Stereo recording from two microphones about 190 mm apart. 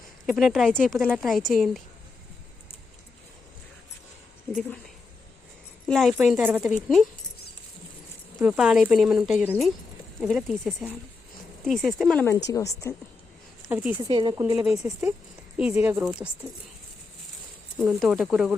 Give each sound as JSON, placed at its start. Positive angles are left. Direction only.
{"t": 0.3, "sound": "speech", "side_deg": 0}
{"t": 5.9, "sound": "speech", "side_deg": 0}
{"t": 8.4, "sound": "speech", "side_deg": -5}
{"t": 12.5, "sound": "a woman's voice", "side_deg": 15}
{"t": 13.7, "sound": "speech", "side_deg": -10}
{"t": 14.1, "sound": "speech", "side_deg": -25}
{"t": 14.6, "sound": "speech", "side_deg": 0}
{"t": 17.7, "sound": "speech", "side_deg": 0}